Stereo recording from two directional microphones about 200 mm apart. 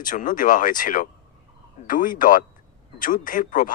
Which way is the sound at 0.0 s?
40° left (ahead or behind).